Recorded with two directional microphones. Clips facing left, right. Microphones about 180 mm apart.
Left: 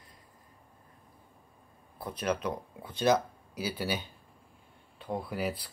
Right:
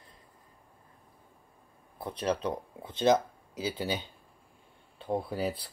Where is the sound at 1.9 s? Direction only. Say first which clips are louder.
Right 1 dB; 25° right (ahead or behind).